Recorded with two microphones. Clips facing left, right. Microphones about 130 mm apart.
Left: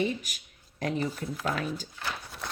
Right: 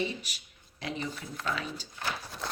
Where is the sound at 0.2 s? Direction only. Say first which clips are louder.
Left 1 dB; 45° left (ahead or behind).